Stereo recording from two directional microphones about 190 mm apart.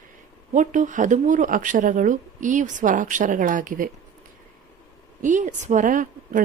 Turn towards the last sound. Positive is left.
turn(degrees=-45)  # may be behind; listen again after turning